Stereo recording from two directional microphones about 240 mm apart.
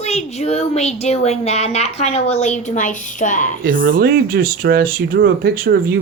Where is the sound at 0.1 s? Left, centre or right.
Left.